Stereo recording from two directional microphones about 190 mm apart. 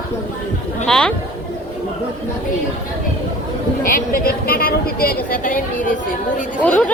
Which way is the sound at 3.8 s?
50° left (ahead or behind).